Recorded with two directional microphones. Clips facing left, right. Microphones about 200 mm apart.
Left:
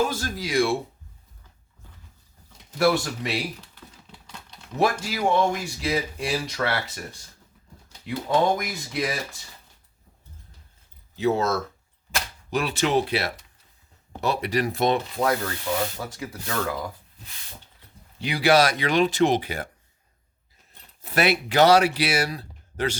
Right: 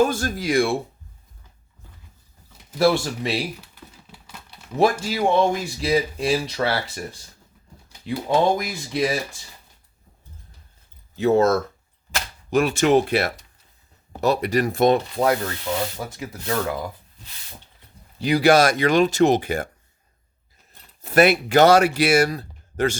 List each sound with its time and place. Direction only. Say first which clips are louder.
0.1 s speech: right 5 dB; 50° right (ahead or behind)
2.7 s speech: right 3 dB; 25° right (ahead or behind)
3.6 s typing: right 2 dB; 10° right (ahead or behind)
4.8 s speech: right 4 dB; 25° right (ahead or behind)
8.0 s speech: right 2 dB; 25° right (ahead or behind)
11.2 s speech: right 6 dB; 50° right (ahead or behind)
15.2 s rub: right 2 dB; 35° right (ahead or behind)
15.7 s speech: even; 20° right (ahead or behind)
18.2 s speech: right 4 dB; 40° right (ahead or behind)
21.0 s speech: right 6 dB; 45° right (ahead or behind)